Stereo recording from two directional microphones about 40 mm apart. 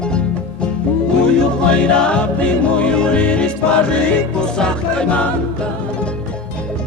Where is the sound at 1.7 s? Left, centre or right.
Left.